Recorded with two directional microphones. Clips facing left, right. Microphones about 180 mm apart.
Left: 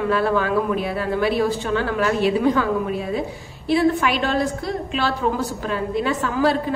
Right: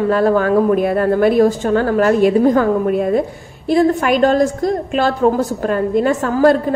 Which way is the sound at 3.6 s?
45° right (ahead or behind).